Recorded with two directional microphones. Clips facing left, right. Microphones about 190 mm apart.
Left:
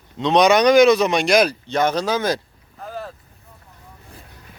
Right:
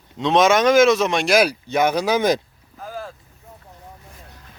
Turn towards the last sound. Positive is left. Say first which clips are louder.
# left 1 dB
turn(degrees=0)  # may be behind; listen again after turning